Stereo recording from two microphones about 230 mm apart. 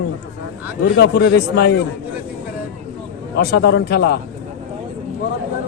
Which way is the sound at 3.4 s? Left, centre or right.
Left.